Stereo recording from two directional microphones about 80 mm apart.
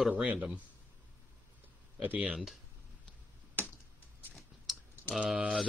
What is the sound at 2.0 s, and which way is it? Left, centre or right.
Speech, centre.